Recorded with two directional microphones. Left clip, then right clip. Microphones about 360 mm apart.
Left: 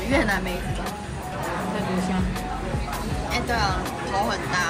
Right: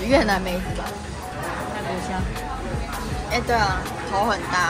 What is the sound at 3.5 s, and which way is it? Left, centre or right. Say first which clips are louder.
Speech: right 4 dB; right.